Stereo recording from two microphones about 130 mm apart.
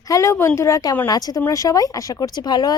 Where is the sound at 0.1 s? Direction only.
20° left (ahead or behind).